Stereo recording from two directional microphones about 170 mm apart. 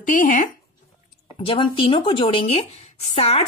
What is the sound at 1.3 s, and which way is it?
Speech, 30° left (ahead or behind).